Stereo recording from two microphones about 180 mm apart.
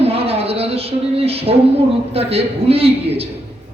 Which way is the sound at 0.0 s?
35° right (ahead or behind).